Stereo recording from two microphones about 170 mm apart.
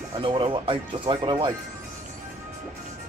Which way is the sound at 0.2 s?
30° right (ahead or behind).